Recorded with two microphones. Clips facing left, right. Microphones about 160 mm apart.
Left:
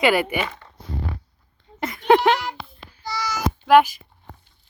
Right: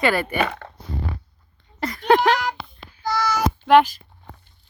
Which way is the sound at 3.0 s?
50° right (ahead or behind).